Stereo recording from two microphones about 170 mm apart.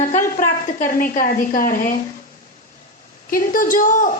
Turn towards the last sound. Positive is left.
turn(degrees=50)  # may be behind; listen again after turning